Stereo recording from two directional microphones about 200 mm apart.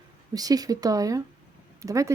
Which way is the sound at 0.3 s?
20° right (ahead or behind).